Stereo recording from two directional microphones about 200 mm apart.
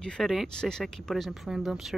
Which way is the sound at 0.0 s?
5° left (ahead or behind).